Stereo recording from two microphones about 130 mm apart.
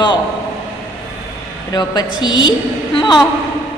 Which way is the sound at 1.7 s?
30° left (ahead or behind).